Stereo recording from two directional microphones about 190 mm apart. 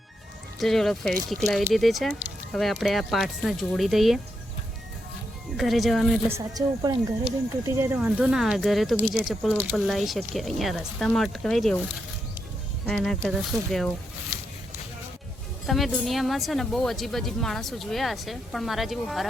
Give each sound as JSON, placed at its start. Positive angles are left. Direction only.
{"t": 0.6, "sound": "speech", "side_deg": 0}
{"t": 5.5, "sound": "speech", "side_deg": 0}
{"t": 6.2, "sound": "speech", "side_deg": -15}
{"t": 15.6, "sound": "speech", "side_deg": 0}